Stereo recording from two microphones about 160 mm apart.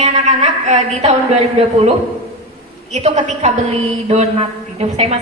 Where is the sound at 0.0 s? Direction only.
45° right (ahead or behind).